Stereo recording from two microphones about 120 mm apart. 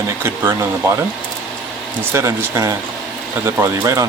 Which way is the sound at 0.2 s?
20° right (ahead or behind).